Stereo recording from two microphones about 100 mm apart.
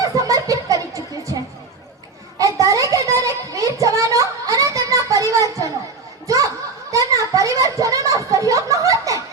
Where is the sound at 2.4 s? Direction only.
35° right (ahead or behind).